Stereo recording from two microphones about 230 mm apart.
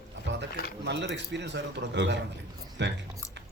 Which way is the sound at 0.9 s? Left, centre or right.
Right.